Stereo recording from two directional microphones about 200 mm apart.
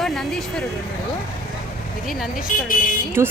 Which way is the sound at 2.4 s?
45° left (ahead or behind).